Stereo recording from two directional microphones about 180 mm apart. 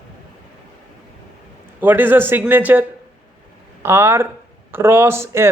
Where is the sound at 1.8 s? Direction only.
10° right (ahead or behind).